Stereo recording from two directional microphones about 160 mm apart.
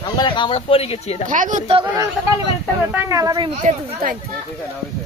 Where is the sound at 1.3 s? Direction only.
50° right (ahead or behind).